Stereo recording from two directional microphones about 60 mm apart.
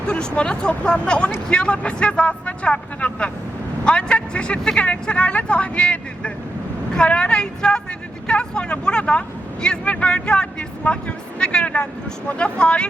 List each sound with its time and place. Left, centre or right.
0.1 s speech: centre